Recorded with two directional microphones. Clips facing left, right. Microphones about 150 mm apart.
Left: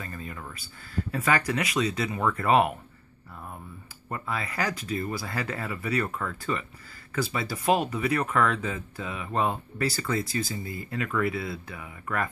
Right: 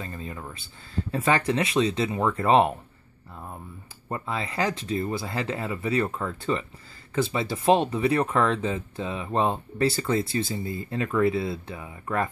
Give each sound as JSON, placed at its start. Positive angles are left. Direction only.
{"t": 0.0, "sound": "speech", "side_deg": -25}
{"t": 4.1, "sound": "speech", "side_deg": -25}